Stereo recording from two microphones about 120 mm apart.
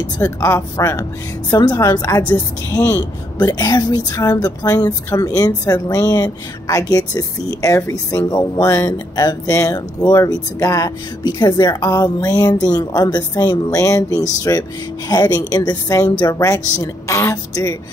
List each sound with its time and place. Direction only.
0.4 s a woman's voice: 25° left (ahead or behind)
9.1 s a woman's voice: 35° left (ahead or behind)